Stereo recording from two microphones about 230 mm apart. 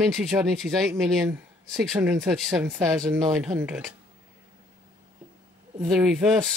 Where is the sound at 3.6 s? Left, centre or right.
Centre.